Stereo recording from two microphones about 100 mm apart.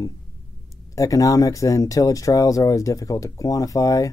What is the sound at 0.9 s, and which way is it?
Speech, 35° left (ahead or behind).